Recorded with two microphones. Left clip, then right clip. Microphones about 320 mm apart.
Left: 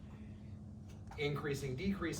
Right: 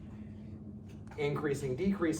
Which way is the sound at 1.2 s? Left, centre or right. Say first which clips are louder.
Right 6 dB; centre.